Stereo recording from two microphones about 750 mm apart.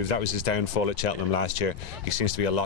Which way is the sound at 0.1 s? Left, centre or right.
Left.